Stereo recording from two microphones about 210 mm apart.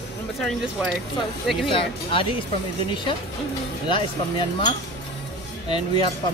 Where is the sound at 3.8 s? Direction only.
20° left (ahead or behind).